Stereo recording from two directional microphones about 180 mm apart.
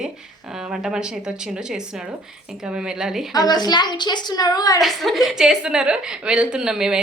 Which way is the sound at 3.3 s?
20° left (ahead or behind).